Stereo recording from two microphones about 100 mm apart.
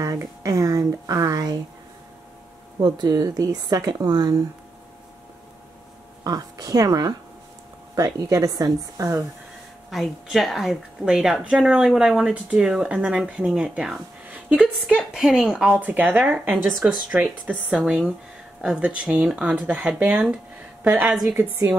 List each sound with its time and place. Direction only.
0.0 s speech: 35° right (ahead or behind)
2.8 s speech: 45° right (ahead or behind)
6.2 s speech: 40° right (ahead or behind)
9.8 s a woman's voice: centre (ahead or behind)
15.8 s speech: 15° right (ahead or behind)
17.7 s a woman's voice: 5° right (ahead or behind)
20.0 s speech: 15° right (ahead or behind)
21.3 s a woman's voice: 20° right (ahead or behind)